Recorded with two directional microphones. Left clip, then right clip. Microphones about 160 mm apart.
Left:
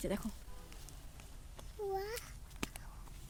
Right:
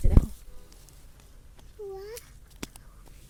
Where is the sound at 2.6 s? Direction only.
25° right (ahead or behind).